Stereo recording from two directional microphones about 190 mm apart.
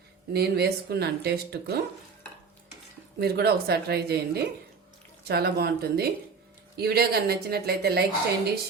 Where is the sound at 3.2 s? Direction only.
60° right (ahead or behind).